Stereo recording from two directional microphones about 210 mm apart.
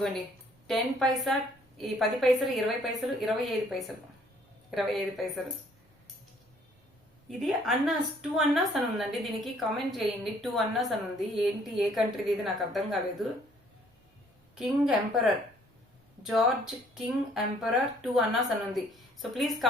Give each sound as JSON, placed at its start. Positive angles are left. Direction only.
{"t": 0.7, "sound": "speech", "side_deg": 0}
{"t": 7.3, "sound": "speech", "side_deg": 0}
{"t": 14.5, "sound": "speech", "side_deg": 0}